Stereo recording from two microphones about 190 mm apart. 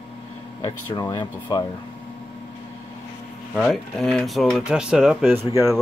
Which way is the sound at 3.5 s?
Centre (ahead or behind).